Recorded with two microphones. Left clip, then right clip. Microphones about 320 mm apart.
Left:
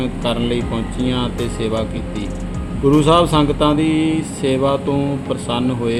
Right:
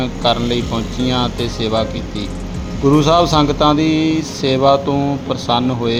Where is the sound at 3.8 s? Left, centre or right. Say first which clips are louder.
Right 2 dB; left.